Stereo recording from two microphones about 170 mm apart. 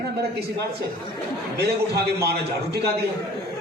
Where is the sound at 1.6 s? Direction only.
70° right (ahead or behind).